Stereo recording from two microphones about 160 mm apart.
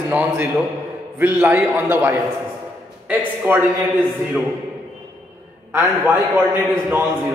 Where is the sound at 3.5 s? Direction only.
10° right (ahead or behind).